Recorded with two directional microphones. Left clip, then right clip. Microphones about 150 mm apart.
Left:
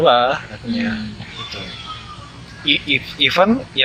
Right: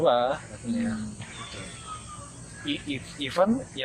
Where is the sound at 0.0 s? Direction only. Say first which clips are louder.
Left 9 dB; 15° left (ahead or behind).